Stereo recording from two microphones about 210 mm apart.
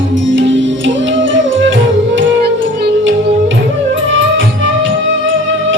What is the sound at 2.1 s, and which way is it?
Music, 55° right (ahead or behind).